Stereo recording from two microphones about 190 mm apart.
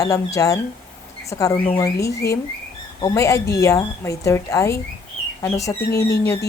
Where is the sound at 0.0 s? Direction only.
15° left (ahead or behind).